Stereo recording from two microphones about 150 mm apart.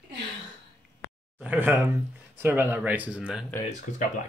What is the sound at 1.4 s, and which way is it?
Speech, 10° right (ahead or behind).